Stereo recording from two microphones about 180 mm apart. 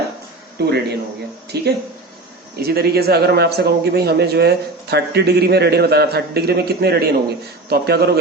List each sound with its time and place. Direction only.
0.6 s a man's voice: 65° right (ahead or behind)